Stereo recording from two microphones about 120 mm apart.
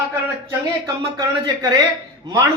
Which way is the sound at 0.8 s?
35° right (ahead or behind).